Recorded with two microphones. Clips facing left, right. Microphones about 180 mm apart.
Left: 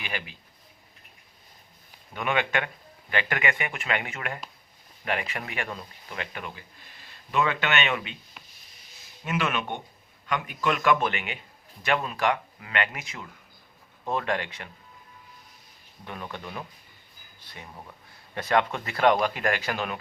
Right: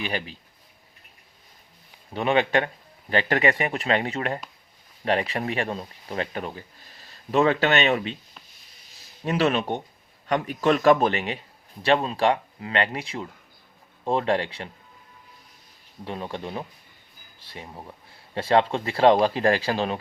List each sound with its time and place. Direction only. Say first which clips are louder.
0.0 s speech: right 6 dB; 35° right (ahead or behind)
2.1 s speech: right 6 dB; 30° right (ahead or behind)
9.2 s speech: right 6 dB; 35° right (ahead or behind)
16.0 s speech: right 6 dB; 25° right (ahead or behind)